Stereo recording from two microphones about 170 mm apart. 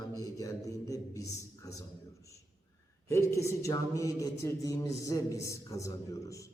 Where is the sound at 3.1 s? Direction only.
15° left (ahead or behind).